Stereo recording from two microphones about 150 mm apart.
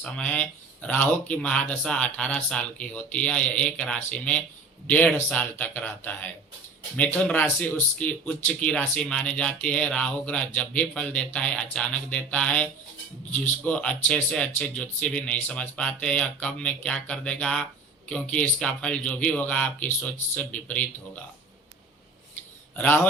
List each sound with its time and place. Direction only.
0.0 s speech: 10° left (ahead or behind)
22.7 s a man's voice: 10° left (ahead or behind)